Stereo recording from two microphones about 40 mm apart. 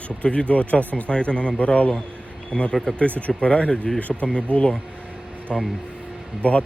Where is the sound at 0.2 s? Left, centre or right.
Left.